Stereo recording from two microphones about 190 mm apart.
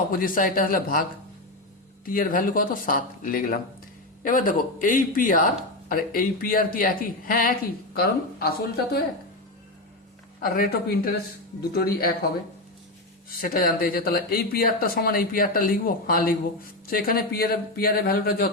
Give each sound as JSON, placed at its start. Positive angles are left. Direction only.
{"t": 0.1, "sound": "speech", "side_deg": 45}
{"t": 2.0, "sound": "speech", "side_deg": 50}
{"t": 10.4, "sound": "speech", "side_deg": 50}
{"t": 13.4, "sound": "speech", "side_deg": 50}